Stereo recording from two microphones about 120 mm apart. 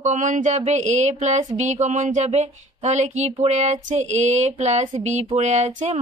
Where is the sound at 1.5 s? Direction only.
80° right.